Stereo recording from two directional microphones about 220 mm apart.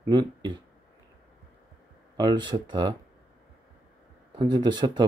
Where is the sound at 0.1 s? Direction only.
20° right (ahead or behind).